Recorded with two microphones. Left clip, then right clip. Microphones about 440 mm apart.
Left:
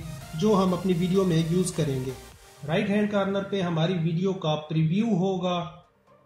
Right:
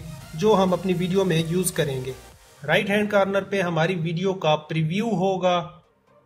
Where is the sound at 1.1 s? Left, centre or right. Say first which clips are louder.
Right 3 dB; right.